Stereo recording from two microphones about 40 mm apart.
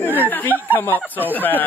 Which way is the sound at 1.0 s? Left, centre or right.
Right.